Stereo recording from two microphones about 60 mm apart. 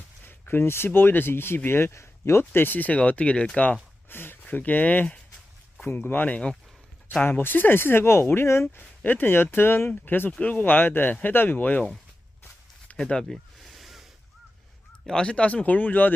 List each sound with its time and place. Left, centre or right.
0.3 s a sound: left
0.9 s speech: left
2.4 s speech: left
4.1 s speech: left
5.8 s speech: left
13.0 s speech: centre
13.3 s a sound: centre
15.0 s speech: centre; by 16.1 s left